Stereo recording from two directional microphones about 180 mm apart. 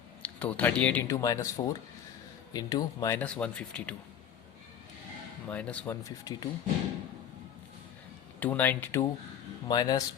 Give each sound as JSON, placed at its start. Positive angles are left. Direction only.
{"t": 0.2, "sound": "speech", "side_deg": 10}
{"t": 5.5, "sound": "speech", "side_deg": 5}
{"t": 8.4, "sound": "speech", "side_deg": 10}